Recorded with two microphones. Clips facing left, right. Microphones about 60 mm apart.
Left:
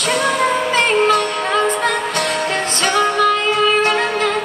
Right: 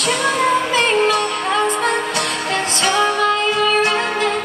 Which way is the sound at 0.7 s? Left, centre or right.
Left.